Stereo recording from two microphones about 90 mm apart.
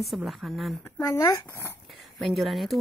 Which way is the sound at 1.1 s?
35° left (ahead or behind).